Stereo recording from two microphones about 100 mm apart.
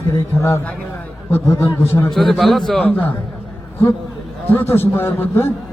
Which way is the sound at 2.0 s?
Centre (ahead or behind).